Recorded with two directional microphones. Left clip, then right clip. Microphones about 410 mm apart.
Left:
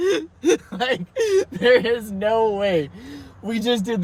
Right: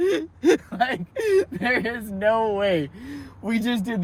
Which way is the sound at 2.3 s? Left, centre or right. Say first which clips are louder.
Left 3 dB; centre.